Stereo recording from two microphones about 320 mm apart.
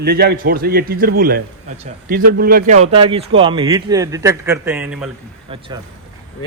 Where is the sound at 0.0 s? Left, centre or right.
Right; by 5.1 s centre.